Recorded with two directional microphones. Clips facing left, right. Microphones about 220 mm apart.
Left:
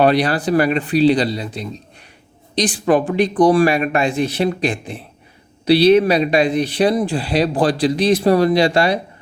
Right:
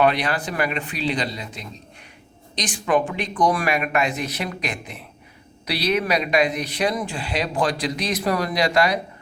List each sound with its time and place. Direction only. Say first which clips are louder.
0.0 s speech: left 6 dB; 35° left (ahead or behind)